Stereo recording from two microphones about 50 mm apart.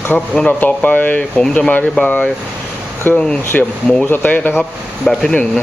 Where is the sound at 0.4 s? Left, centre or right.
Left.